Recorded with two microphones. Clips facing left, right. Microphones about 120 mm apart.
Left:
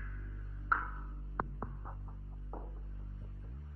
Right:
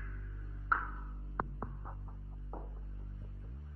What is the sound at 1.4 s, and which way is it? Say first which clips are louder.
Throbbing: even; centre (ahead or behind).